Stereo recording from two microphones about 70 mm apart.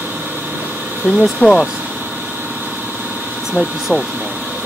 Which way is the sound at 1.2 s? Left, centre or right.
Centre.